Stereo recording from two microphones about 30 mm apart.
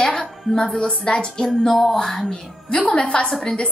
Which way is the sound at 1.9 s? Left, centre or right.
Left.